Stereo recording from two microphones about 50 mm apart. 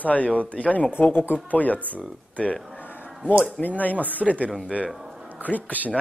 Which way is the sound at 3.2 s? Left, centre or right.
Centre.